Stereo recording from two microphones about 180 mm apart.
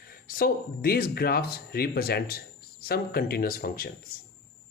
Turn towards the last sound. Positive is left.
turn(degrees=55)  # may be behind; listen again after turning